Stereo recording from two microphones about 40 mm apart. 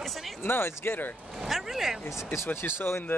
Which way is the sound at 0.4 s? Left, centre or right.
Left.